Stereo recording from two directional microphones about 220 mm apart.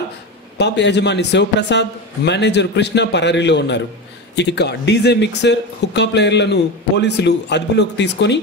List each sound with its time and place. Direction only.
0.6 s a man's voice: 50° left (ahead or behind)